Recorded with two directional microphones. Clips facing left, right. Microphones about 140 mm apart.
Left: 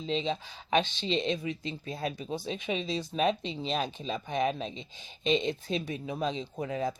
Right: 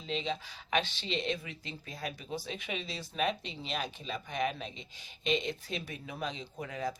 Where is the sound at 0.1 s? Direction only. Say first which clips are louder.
Left 4 dB; 25° left (ahead or behind).